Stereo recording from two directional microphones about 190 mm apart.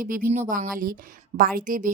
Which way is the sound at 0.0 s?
45° right (ahead or behind).